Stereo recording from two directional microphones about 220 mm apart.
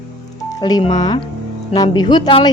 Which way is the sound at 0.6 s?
20° left (ahead or behind).